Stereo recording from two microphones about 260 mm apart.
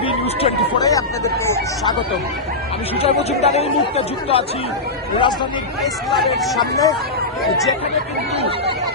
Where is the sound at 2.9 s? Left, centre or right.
Left.